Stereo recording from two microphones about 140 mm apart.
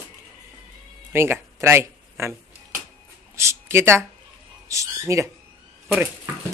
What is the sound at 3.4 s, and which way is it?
Speech, 20° right (ahead or behind).